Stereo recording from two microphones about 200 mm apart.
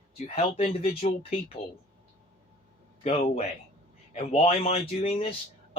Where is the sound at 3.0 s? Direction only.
30° left (ahead or behind).